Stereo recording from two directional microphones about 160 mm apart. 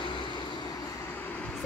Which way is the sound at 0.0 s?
30° left (ahead or behind).